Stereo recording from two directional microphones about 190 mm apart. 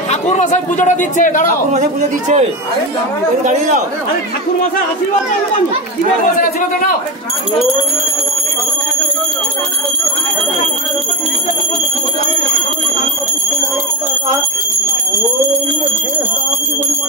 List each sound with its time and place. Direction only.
0.1 s a man's voice: 40° left (ahead or behind)
1.7 s speech: 40° right (ahead or behind)
3.4 s speech: 40° right (ahead or behind)